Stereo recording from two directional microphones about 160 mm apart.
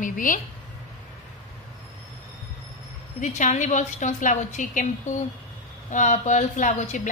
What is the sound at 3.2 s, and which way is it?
A woman's voice, 50° left (ahead or behind).